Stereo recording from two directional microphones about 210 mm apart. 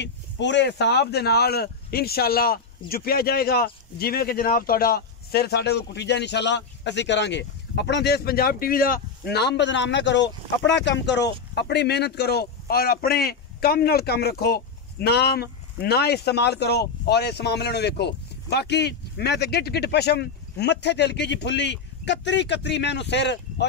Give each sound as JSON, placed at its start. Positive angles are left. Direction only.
{"t": 0.0, "sound": "speech", "side_deg": 55}